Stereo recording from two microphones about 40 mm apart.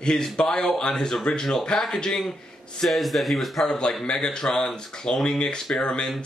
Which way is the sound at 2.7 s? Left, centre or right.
Centre.